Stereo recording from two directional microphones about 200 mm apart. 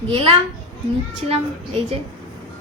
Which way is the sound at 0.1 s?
25° right (ahead or behind).